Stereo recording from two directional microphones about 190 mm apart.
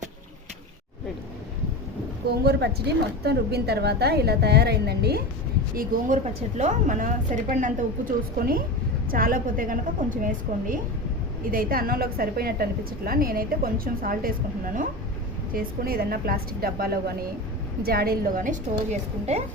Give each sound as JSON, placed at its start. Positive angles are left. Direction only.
{"t": 2.4, "sound": "a woman's voice", "side_deg": -55}
{"t": 5.7, "sound": "a woman's voice", "side_deg": -45}
{"t": 15.5, "sound": "a woman's voice", "side_deg": -50}